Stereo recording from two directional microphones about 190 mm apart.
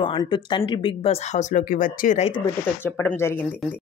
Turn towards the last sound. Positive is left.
turn(degrees=10)  # may be behind; listen again after turning